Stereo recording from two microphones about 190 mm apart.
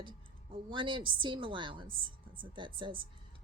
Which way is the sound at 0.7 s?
25° right (ahead or behind).